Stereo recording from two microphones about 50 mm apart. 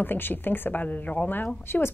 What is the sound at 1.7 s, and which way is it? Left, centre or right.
Speech, left.